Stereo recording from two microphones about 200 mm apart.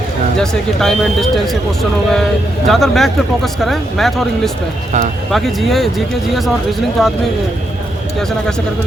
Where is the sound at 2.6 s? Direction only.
Centre (ahead or behind).